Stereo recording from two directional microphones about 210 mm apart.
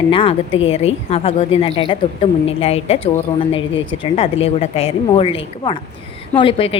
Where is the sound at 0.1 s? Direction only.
25° left (ahead or behind).